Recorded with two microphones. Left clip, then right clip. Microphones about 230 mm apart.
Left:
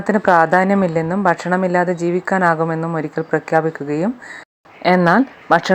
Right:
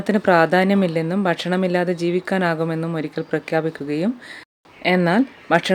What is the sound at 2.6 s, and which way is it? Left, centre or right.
Speech, centre.